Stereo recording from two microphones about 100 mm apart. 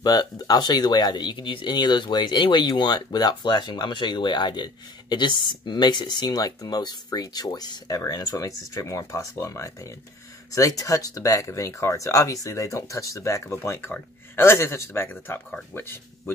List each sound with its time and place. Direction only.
0.0 s a man's voice: 45° left (ahead or behind); by 16.3 s 25° left (ahead or behind)